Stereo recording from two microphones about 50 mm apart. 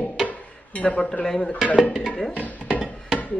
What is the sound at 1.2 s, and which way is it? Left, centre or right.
Speech, centre.